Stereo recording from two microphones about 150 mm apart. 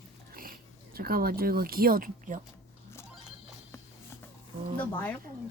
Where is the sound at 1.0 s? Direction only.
85° right; by 2.4 s 65° right (ahead or behind).